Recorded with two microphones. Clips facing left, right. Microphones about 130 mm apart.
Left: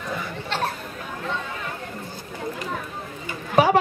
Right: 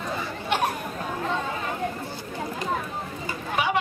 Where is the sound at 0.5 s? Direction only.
15° right (ahead or behind).